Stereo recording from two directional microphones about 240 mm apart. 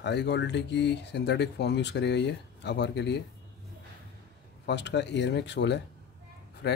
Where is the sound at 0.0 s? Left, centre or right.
Left.